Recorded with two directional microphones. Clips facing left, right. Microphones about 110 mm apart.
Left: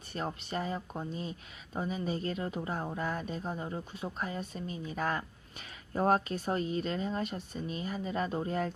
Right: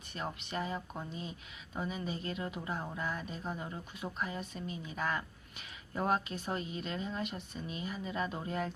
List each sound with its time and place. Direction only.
0.1 s speech: 40° left (ahead or behind)